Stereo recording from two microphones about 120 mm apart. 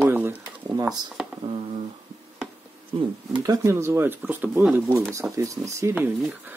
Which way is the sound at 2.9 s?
55° right (ahead or behind).